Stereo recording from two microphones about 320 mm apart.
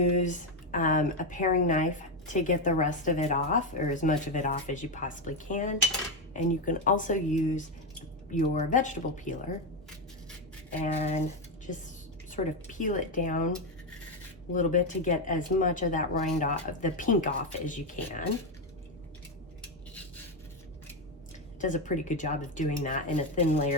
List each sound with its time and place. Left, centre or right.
0.0 s a woman's voice: left
10.9 s a woman's voice: centre
12.3 s a woman's voice: left
14.5 s a woman's voice: left
21.6 s a woman's voice: left